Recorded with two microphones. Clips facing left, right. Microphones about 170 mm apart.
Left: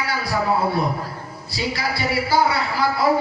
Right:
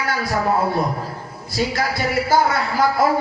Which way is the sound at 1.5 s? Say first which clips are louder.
Right 4 dB; 45° right (ahead or behind).